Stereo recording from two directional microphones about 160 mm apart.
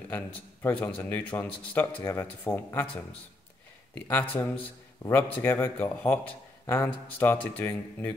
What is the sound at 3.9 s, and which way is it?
Speech, 10° left (ahead or behind).